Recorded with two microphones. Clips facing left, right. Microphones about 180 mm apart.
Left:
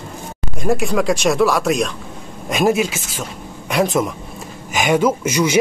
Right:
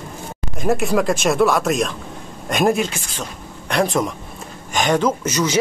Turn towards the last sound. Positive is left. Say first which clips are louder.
# left 3 dB
turn(degrees=10)  # may be behind; listen again after turning